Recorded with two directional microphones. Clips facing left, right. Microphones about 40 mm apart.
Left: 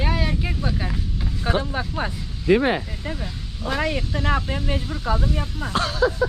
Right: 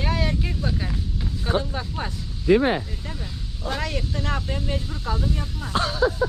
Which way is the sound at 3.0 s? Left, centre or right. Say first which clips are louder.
Left 4 dB; left.